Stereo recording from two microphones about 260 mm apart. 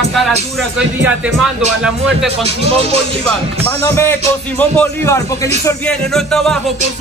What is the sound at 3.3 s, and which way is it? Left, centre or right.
A man's voice, centre.